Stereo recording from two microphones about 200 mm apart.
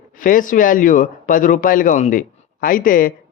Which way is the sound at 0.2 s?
45° left (ahead or behind).